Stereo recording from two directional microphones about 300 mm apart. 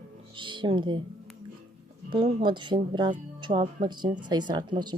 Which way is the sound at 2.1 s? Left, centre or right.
Centre.